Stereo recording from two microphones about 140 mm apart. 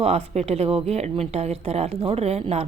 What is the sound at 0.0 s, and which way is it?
Speech, 45° right (ahead or behind).